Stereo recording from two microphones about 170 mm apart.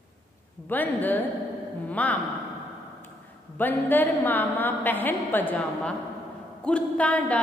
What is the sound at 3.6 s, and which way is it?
A woman's voice, 10° left (ahead or behind).